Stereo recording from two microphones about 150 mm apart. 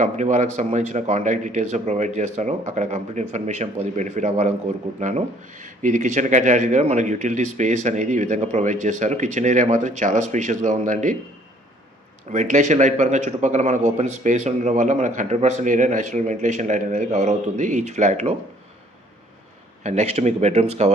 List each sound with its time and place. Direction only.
0.0 s speech: 55° right (ahead or behind)
12.3 s speech: 55° right (ahead or behind)
19.8 s speech: 50° right (ahead or behind)